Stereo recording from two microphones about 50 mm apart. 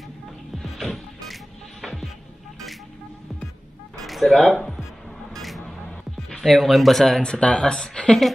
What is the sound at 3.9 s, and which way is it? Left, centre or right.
Cat, centre.